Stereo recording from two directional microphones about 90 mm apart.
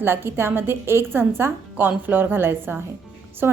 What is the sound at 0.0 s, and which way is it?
A woman's voice, 25° right (ahead or behind).